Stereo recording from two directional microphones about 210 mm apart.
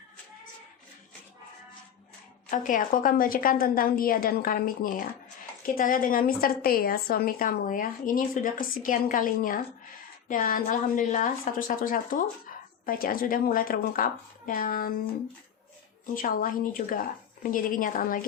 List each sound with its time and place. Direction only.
2.5 s a woman's voice: 40° left (ahead or behind)
16.1 s a woman's voice: 40° left (ahead or behind)